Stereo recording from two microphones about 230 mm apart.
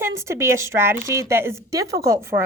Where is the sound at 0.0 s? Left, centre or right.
Centre.